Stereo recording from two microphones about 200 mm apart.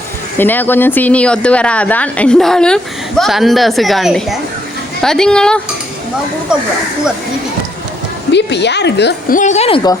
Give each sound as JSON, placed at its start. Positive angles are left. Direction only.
{"t": 0.3, "sound": "speech", "side_deg": 10}
{"t": 8.3, "sound": "a woman's voice", "side_deg": 60}
{"t": 9.4, "sound": "speech", "side_deg": 35}